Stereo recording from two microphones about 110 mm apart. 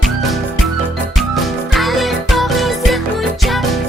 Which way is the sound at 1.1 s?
Centre (ahead or behind).